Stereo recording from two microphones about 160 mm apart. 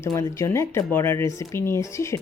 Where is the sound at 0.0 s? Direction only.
20° left (ahead or behind).